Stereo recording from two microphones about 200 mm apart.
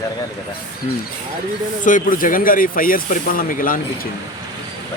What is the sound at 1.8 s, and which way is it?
Speech, 40° left (ahead or behind).